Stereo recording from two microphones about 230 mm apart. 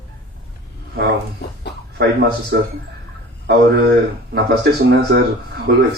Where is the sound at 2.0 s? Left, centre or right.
Right.